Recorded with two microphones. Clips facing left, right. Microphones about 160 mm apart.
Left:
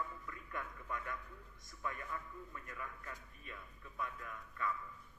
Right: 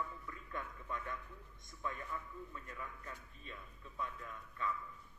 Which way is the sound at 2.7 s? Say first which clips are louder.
Even; 25° right (ahead or behind).